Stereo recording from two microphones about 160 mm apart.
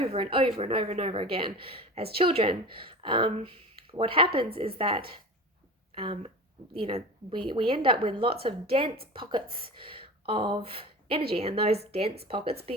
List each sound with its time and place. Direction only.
0.0 s a woman's voice: 35° right (ahead or behind)